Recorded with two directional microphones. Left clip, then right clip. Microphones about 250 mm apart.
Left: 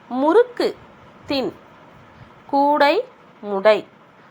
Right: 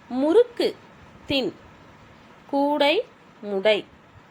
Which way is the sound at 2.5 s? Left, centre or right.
Centre.